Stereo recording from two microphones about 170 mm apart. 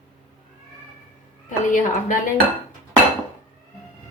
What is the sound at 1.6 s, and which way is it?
Speech, 50° left (ahead or behind).